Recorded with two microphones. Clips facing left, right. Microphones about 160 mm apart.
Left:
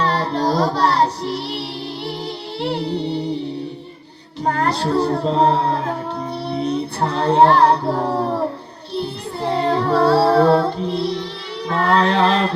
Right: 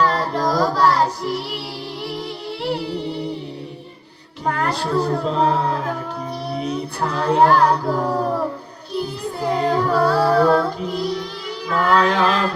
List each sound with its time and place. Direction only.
0.0 s child singing: 30° left (ahead or behind)
2.6 s music: 30° left (ahead or behind)
4.4 s child singing: 35° left (ahead or behind)
11.7 s mantra: 30° left (ahead or behind)